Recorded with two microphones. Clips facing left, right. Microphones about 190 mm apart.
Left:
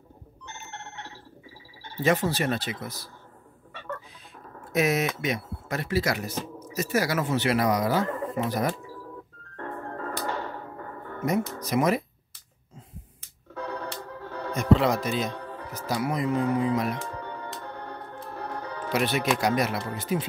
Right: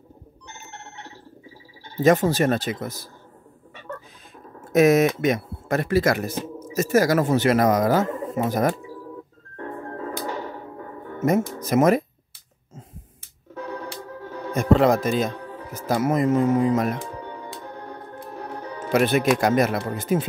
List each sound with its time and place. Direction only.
0.5 s organ: 15° right (ahead or behind)
2.0 s speech: 45° right (ahead or behind)
4.7 s speech: 45° right (ahead or behind)
9.6 s music: 10° right (ahead or behind)
11.6 s speech: 50° right (ahead or behind)
13.7 s music: 10° right (ahead or behind)
14.5 s speech: 50° right (ahead or behind)
17.0 s music: 10° right (ahead or behind)
18.9 s speech: 50° right (ahead or behind)